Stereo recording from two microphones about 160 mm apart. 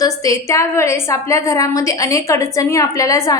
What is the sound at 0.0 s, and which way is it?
A woman's voice, 20° left (ahead or behind).